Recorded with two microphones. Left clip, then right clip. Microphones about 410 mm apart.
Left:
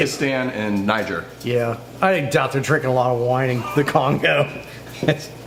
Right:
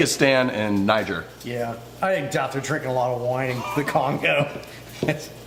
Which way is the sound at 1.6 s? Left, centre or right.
Left.